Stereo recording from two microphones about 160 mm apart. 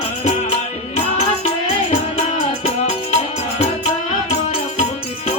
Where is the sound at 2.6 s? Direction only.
40° left (ahead or behind).